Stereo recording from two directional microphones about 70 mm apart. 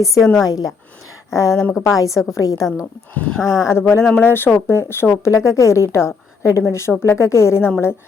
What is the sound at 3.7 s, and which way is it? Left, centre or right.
A woman's voice, left.